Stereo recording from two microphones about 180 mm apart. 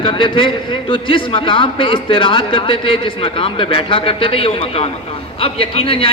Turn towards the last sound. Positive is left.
turn(degrees=30)  # may be behind; listen again after turning